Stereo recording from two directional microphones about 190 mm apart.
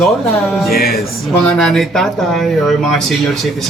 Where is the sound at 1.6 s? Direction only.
5° left (ahead or behind).